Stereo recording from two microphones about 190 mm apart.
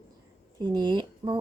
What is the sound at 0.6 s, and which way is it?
Speech, 25° right (ahead or behind).